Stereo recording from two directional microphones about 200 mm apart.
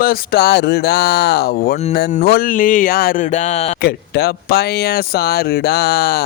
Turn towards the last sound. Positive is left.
turn(degrees=50)  # may be behind; listen again after turning